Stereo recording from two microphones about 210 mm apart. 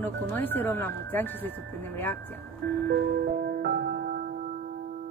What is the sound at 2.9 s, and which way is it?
Music, 50° right (ahead or behind).